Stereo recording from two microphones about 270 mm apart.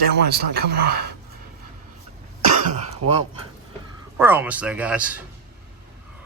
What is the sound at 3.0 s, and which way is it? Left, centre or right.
Speech, right.